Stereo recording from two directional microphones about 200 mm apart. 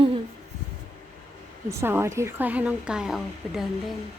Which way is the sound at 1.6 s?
10° right (ahead or behind).